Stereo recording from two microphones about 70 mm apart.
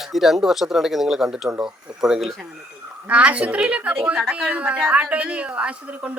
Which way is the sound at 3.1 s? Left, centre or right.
Centre.